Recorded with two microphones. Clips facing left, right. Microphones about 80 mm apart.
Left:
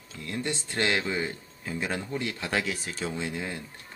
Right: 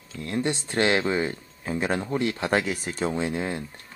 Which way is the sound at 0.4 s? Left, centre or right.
Right.